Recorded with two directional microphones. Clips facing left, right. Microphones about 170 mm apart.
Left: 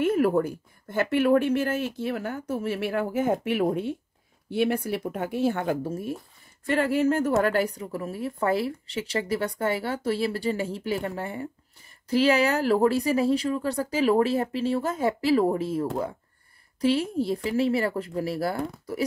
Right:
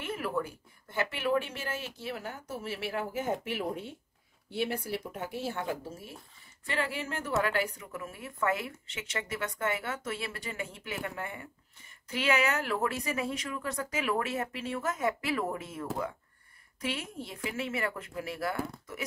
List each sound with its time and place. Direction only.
0.0 s a woman's voice: 45° left (ahead or behind)